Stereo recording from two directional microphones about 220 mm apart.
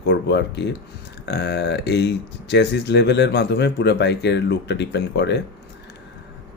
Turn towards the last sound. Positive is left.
turn(degrees=50)  # may be behind; listen again after turning